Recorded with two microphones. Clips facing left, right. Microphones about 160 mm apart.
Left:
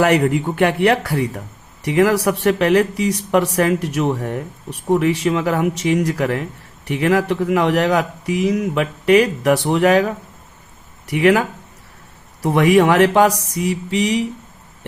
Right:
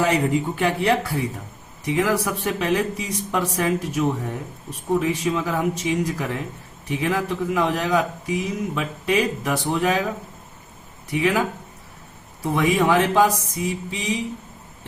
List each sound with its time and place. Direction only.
0.0 s speech: 65° left (ahead or behind)
11.1 s speech: 70° left (ahead or behind)